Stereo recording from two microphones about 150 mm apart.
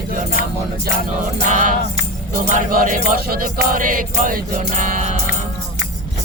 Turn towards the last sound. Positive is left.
turn(degrees=-55)  # may be behind; listen again after turning